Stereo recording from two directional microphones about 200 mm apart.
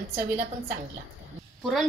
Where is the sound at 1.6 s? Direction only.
Centre (ahead or behind).